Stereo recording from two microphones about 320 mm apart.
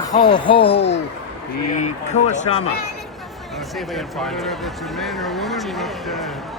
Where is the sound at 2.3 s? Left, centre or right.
Centre.